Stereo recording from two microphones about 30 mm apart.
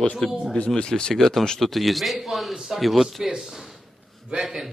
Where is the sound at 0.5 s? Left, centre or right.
Left.